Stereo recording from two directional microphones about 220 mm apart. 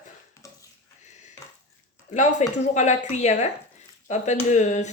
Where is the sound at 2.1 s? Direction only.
35° left (ahead or behind).